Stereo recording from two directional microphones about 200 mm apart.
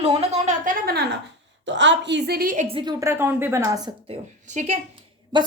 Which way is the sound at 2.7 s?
25° right (ahead or behind).